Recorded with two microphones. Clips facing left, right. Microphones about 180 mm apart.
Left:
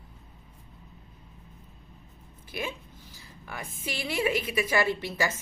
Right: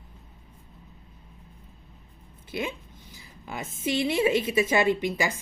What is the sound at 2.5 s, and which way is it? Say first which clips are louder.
A woman's voice: right 3 dB; 25° right (ahead or behind).